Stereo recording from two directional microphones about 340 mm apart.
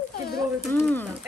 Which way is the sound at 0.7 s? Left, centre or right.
Centre.